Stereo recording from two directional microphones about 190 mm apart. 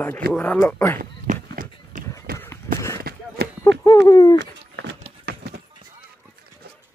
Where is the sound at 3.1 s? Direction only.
55° right (ahead or behind).